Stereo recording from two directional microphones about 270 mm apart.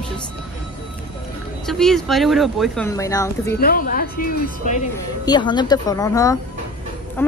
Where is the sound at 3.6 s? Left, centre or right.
Left.